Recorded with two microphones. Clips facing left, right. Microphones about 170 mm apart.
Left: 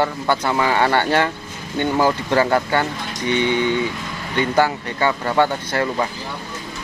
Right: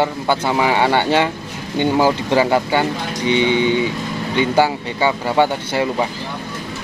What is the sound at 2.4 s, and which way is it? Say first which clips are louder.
Speech: right 1 dB; 15° right (ahead or behind).